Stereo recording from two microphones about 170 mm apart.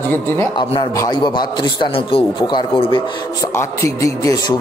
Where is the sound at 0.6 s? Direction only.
25° left (ahead or behind).